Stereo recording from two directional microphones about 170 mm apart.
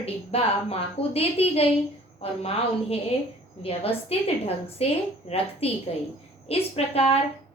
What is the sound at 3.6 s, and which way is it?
A woman's voice, 35° left (ahead or behind).